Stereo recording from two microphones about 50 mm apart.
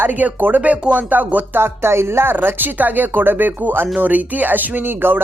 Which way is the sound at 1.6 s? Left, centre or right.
Right.